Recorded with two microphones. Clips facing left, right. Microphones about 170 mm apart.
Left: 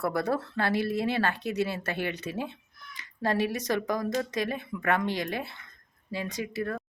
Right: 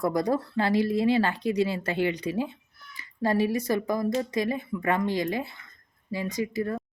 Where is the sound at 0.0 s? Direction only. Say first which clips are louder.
Right 3 dB; 15° right (ahead or behind).